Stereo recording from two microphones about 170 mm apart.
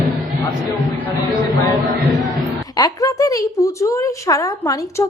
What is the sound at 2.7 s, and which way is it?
A woman's voice, 20° left (ahead or behind).